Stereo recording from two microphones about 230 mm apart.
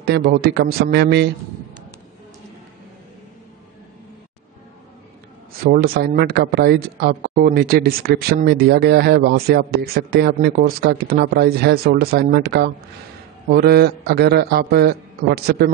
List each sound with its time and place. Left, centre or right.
0.0 s speech: right
5.6 s speech: right